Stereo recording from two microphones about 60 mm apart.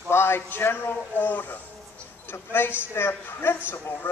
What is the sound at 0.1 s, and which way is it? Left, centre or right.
A man's voice, left.